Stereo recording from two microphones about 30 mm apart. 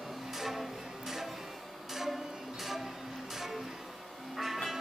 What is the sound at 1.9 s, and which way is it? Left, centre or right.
Music, centre.